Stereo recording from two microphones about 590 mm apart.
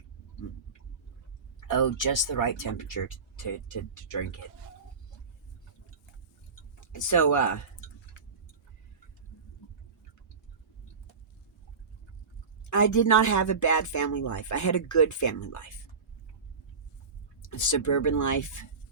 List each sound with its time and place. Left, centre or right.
1.6 s speech: left
6.7 s speech: left
12.7 s speech: left
17.5 s speech: left